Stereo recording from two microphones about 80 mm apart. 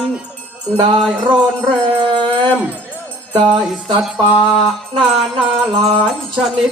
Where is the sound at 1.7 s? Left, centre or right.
Right.